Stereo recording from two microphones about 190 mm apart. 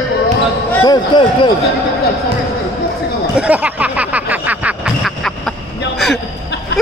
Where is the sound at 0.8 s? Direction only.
25° left (ahead or behind).